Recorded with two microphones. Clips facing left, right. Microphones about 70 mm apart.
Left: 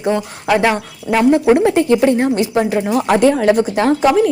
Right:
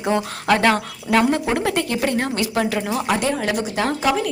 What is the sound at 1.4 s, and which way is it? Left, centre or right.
Speech, left.